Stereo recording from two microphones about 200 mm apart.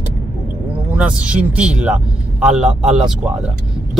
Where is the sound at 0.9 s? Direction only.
5° right (ahead or behind).